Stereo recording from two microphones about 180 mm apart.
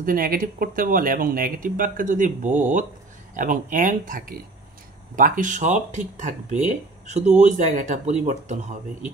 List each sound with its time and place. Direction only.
0.0 s speech: 50° right (ahead or behind)